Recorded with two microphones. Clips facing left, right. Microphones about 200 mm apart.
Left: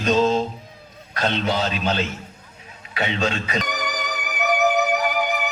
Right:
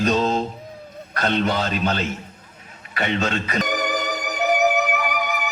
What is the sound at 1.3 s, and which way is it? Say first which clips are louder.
Speech: right 2 dB; 55° right (ahead or behind).